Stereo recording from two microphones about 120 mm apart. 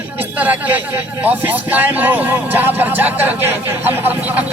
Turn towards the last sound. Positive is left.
turn(degrees=-15)  # may be behind; listen again after turning